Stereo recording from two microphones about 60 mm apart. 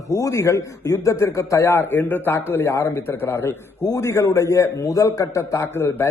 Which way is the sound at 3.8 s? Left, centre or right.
Left.